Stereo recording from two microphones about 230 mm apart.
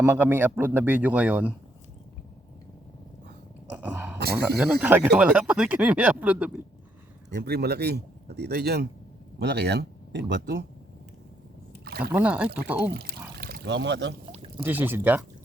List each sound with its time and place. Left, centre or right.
0.0 s a man's voice: centre
3.8 s a sound: centre
4.5 s speech: centre
7.3 s speech: right
12.1 s a man's voice: centre
12.9 s speech: right
14.6 s a man's voice: centre